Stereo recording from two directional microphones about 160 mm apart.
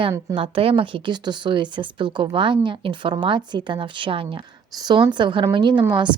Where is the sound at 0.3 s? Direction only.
35° right (ahead or behind).